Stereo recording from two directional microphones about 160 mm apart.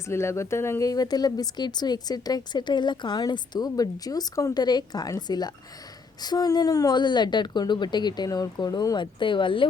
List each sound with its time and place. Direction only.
0.1 s speech: 15° left (ahead or behind); by 9.6 s 30° left (ahead or behind)